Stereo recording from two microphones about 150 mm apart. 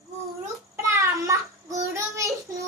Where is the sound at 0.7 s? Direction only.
15° right (ahead or behind).